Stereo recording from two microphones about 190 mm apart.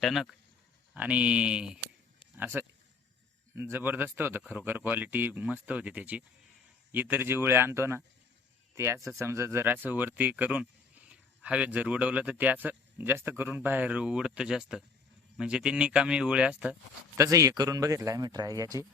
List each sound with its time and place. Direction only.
0.0 s speech: centre (ahead or behind)
17.2 s speech: 15° right (ahead or behind)